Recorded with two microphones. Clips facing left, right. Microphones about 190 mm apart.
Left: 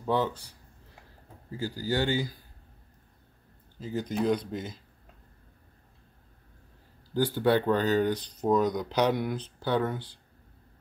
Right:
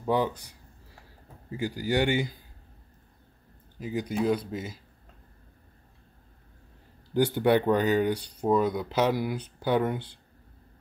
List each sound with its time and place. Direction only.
0.0 s speech: 15° right (ahead or behind)
1.6 s a man's voice: 20° right (ahead or behind)
3.8 s speech: 10° right (ahead or behind)
7.2 s speech: 20° right (ahead or behind)